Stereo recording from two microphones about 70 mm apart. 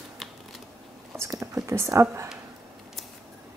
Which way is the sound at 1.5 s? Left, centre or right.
Right.